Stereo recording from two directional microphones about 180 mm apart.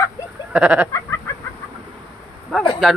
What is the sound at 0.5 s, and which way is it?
Goat, 5° right (ahead or behind).